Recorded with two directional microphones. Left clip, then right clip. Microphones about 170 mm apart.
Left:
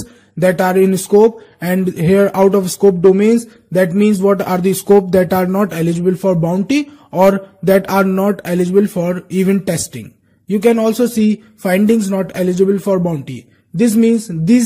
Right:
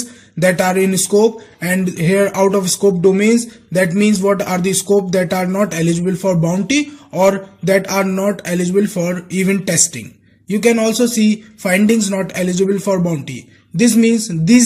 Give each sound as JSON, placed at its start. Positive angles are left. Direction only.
{"t": 0.4, "sound": "speech", "side_deg": 50}